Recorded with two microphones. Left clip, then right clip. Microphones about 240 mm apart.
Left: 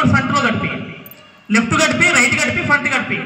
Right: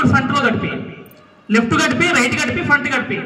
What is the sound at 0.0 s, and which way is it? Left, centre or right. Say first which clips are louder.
A man's voice: even; centre.